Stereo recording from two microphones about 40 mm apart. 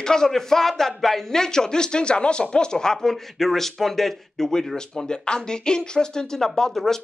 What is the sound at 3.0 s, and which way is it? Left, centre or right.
Speech, centre.